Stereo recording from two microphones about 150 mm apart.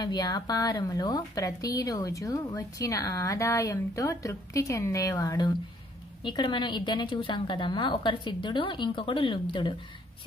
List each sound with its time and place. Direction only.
0.0 s a woman's voice: 30° left (ahead or behind)